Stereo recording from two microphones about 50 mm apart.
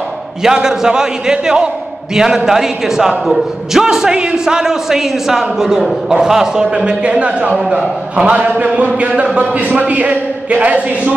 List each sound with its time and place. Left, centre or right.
0.4 s a man's voice: centre; by 11.1 s right